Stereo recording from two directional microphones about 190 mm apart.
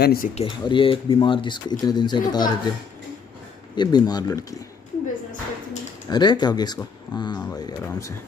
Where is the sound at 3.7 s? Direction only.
20° left (ahead or behind).